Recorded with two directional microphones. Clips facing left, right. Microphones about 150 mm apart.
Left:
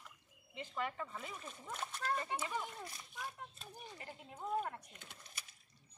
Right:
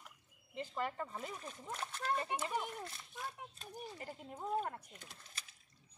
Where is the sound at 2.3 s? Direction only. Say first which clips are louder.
Right 2 dB; 10° right (ahead or behind).